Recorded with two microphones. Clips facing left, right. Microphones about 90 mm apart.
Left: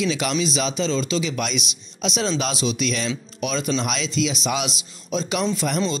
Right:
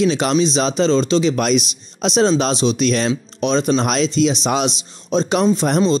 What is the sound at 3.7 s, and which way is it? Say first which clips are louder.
A man's voice: right 7 dB; 45° right (ahead or behind).